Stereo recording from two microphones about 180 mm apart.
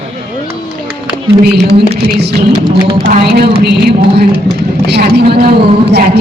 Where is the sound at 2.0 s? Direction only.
65° right (ahead or behind).